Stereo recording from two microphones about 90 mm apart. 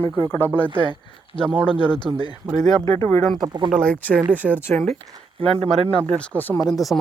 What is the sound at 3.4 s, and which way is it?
Speech, 50° right (ahead or behind).